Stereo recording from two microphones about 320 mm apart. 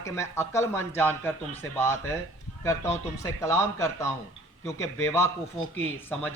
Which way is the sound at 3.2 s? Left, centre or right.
Centre.